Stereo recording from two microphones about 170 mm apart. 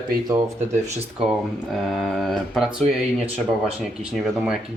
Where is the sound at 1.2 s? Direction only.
Centre (ahead or behind).